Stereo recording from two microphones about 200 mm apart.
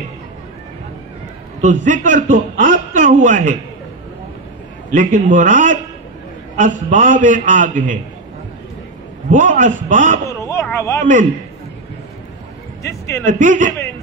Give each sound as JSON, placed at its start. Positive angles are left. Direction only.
{"t": 1.6, "sound": "a man's voice", "side_deg": -40}
{"t": 4.9, "sound": "a man's voice", "side_deg": -40}
{"t": 9.3, "sound": "a man's voice", "side_deg": -40}
{"t": 10.4, "sound": "a sound", "side_deg": 15}
{"t": 12.8, "sound": "speech", "side_deg": 15}
{"t": 13.2, "sound": "a man's voice", "side_deg": -40}